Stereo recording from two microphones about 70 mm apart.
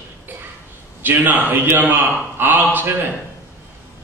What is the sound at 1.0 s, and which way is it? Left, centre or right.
A man's voice, right.